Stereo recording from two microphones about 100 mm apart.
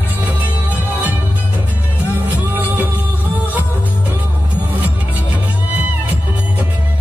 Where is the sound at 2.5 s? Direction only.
20° right (ahead or behind).